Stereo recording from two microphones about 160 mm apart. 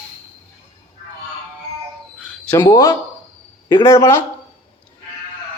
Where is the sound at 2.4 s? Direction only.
15° left (ahead or behind).